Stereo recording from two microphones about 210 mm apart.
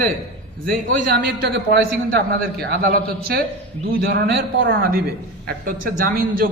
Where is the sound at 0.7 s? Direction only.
45° right (ahead or behind).